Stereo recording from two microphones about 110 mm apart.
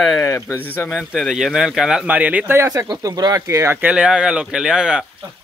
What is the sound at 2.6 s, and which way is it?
Speech, 25° right (ahead or behind).